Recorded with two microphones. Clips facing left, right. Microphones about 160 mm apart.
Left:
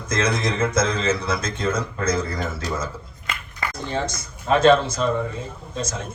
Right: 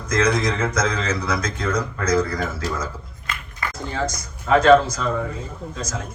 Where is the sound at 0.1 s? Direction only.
25° left (ahead or behind).